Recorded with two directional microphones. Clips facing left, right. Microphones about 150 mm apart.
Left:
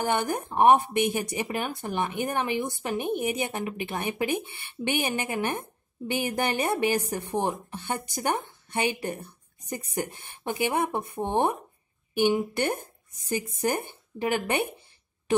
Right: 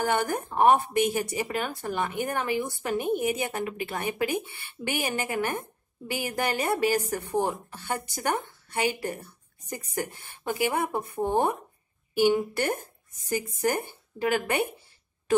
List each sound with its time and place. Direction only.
0.0 s a woman's voice: 20° left (ahead or behind)